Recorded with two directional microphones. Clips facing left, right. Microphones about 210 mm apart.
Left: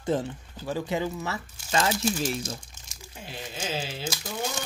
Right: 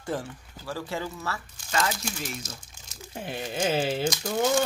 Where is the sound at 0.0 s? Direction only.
20° left (ahead or behind).